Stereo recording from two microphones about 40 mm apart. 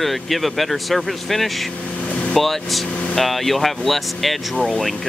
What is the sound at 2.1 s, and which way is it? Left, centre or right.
Vehicle, left.